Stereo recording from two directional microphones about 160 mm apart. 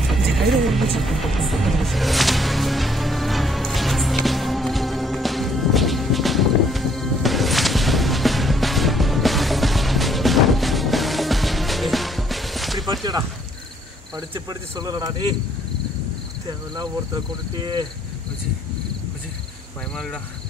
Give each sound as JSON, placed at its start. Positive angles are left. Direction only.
{"t": 0.1, "sound": "music", "side_deg": 0}
{"t": 14.1, "sound": "speech", "side_deg": -25}
{"t": 16.4, "sound": "speech", "side_deg": -25}